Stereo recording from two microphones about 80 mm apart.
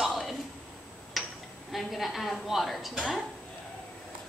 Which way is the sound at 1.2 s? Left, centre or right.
Centre.